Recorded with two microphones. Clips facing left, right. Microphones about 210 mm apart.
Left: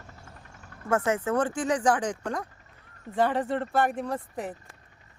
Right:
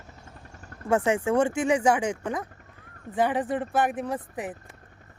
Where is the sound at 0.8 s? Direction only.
15° right (ahead or behind).